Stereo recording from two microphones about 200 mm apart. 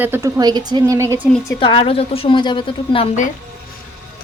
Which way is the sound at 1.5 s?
25° left (ahead or behind).